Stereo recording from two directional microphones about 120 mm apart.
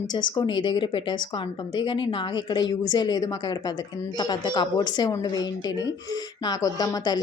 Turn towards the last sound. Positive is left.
turn(degrees=35)  # may be behind; listen again after turning